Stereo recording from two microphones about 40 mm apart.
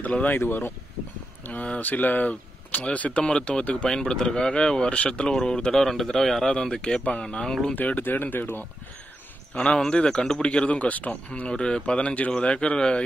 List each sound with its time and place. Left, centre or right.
0.0 s speech: left
0.4 s speech: left
1.8 s speech: left
3.3 s speech: left
5.3 s speech: centre
6.5 s speech: left
7.7 s speech: left
9.5 s speech: left
10.4 s speech: left
11.5 s speech: centre